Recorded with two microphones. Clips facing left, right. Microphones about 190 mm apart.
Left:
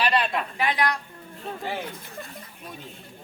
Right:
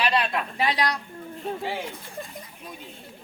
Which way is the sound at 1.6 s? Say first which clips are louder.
Left 2 dB; centre (ahead or behind).